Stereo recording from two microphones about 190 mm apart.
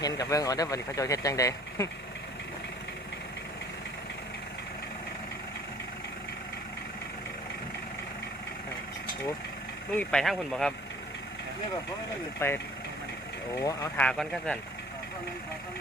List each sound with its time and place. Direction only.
0.0 s speech: 20° left (ahead or behind)
9.9 s speech: 5° left (ahead or behind)
12.4 s speech: 15° left (ahead or behind)
13.6 s speech: 20° left (ahead or behind)
14.0 s speech: 5° left (ahead or behind)